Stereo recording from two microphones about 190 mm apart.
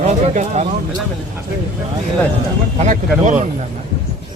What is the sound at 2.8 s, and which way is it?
Speech, 40° right (ahead or behind).